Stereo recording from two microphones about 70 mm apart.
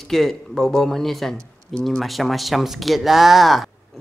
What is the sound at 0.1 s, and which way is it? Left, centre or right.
Speech, centre.